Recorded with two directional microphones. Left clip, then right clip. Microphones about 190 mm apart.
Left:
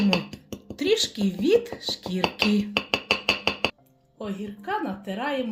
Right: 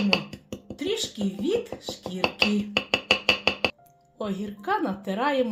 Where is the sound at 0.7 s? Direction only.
35° left (ahead or behind).